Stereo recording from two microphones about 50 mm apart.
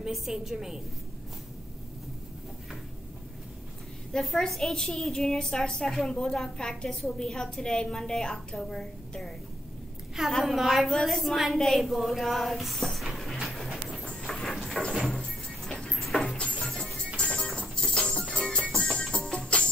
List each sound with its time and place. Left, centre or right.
0.0 s a woman's voice: centre
4.1 s a woman's voice: centre
10.4 s a woman's voice: centre
13.0 s dog: centre
14.2 s a sound: centre
15.0 s music: centre
15.2 s music: centre
15.9 s a sound: centre
16.2 s a sound: centre
16.6 s music: centre
17.2 s music: left